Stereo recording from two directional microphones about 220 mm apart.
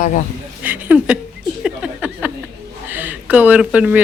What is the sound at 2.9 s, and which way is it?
Speech, 10° right (ahead or behind).